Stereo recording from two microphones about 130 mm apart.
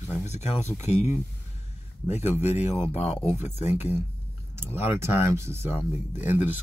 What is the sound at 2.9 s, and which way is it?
Speech, 60° left (ahead or behind).